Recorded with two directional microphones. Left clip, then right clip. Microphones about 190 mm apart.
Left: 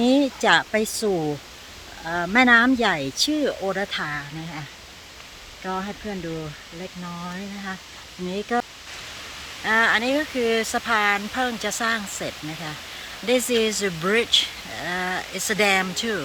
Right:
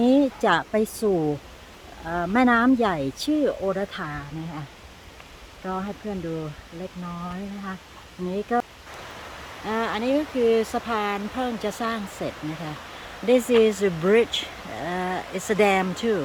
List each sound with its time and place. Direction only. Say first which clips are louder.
0.0 s a sound: even; centre (ahead or behind)
0.4 s speech: left 2 dB; centre (ahead or behind)
1.1 s speech: right 1 dB; 5° left (ahead or behind)
5.6 s speech: left 1 dB; 10° left (ahead or behind)
8.3 s speech: even; 5° left (ahead or behind)
9.6 s speech: left 6 dB; 5° right (ahead or behind)